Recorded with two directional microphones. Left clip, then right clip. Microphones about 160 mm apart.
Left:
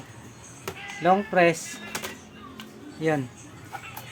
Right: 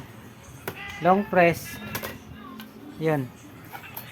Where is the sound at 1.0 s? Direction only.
20° right (ahead or behind).